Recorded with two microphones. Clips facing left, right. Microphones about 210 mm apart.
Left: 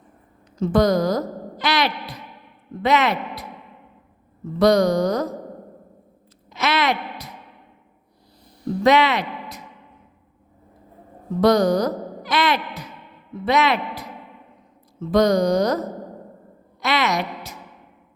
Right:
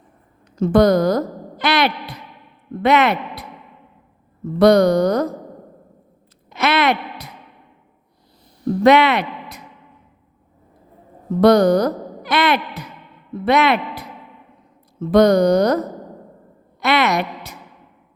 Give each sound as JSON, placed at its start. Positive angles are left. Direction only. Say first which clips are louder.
{"t": 0.6, "sound": "a woman's voice", "louder": "right 4 dB", "side_deg": -60}
{"t": 4.6, "sound": "speech", "louder": "right 4 dB", "side_deg": -60}
{"t": 6.5, "sound": "a sound", "louder": "right 4 dB", "side_deg": -60}
{"t": 8.8, "sound": "speech", "louder": "right 4 dB", "side_deg": -60}
{"t": 11.3, "sound": "speech", "louder": "right 4 dB", "side_deg": -60}
{"t": 15.1, "sound": "speech", "louder": "right 4 dB", "side_deg": -60}
{"t": 16.8, "sound": "a sound", "louder": "right 4 dB", "side_deg": -60}